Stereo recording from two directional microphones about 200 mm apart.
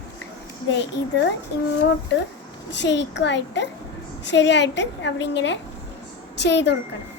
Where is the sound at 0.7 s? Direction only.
60° left (ahead or behind).